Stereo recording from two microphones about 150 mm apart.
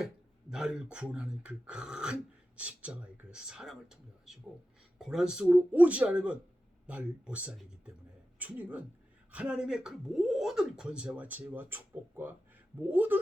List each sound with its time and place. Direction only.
0.5 s speech: 5° right (ahead or behind)